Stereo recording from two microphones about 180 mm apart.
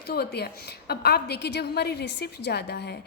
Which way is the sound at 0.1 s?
60° left (ahead or behind).